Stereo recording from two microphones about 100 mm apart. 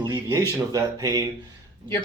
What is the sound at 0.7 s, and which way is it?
Speech, 35° right (ahead or behind).